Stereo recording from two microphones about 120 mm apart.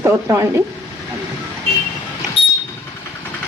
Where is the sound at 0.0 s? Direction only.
25° right (ahead or behind).